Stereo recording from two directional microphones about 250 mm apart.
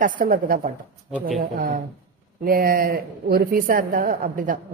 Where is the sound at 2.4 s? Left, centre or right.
Right.